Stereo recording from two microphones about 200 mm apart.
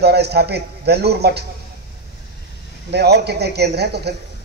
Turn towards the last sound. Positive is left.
turn(degrees=-55)  # may be behind; listen again after turning